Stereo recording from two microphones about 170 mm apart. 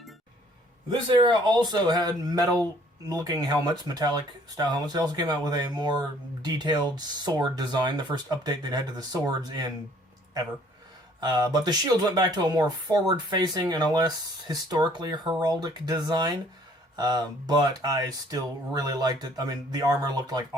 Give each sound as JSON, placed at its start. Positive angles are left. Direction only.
{"t": 0.9, "sound": "speech", "side_deg": -30}
{"t": 11.2, "sound": "speech", "side_deg": -25}